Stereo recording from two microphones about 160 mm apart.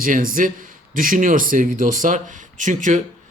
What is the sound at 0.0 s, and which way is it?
Speech, 60° right (ahead or behind).